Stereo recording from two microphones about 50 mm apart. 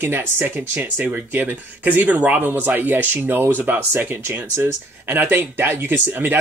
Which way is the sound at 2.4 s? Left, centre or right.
Right.